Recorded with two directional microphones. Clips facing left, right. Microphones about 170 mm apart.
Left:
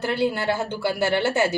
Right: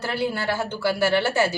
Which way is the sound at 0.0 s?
20° left (ahead or behind).